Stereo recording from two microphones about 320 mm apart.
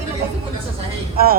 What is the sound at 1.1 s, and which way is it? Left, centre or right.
Speech, right.